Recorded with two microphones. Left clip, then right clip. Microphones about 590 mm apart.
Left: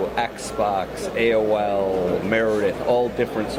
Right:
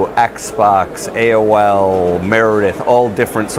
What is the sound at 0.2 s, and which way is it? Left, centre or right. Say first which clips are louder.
Speech: right 11 dB; right.